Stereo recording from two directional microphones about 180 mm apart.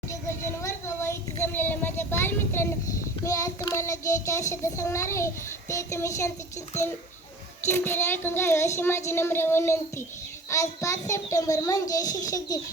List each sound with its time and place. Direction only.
0.6 s child singing: 15° left (ahead or behind)
7.7 s child singing: 15° left (ahead or behind)
10.5 s a child's voice: 15° left (ahead or behind)